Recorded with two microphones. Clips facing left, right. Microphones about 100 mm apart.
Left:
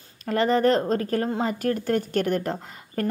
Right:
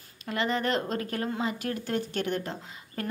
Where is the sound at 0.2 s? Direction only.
40° left (ahead or behind).